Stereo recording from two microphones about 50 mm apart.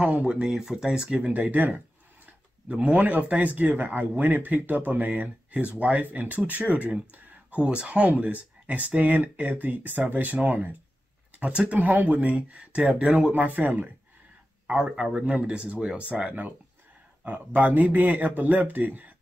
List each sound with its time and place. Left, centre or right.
0.0 s speech: right
0.4 s speech: centre
13.3 s speech: right
14.8 s speech: centre
15.2 s speech: right
17.2 s speech: right